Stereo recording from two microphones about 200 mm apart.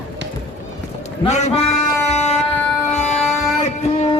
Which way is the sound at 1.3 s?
35° left (ahead or behind).